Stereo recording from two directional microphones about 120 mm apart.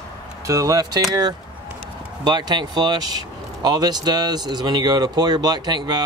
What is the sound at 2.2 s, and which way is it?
Speech, 35° right (ahead or behind).